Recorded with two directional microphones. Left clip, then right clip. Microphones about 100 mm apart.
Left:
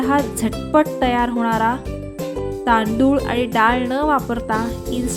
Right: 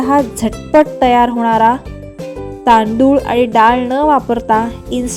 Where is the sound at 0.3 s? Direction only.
30° right (ahead or behind).